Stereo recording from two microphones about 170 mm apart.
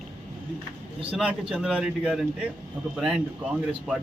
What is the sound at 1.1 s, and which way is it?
A man's voice, 5° right (ahead or behind).